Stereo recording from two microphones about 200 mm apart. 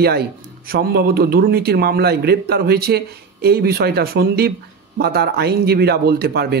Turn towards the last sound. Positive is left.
turn(degrees=-50)  # may be behind; listen again after turning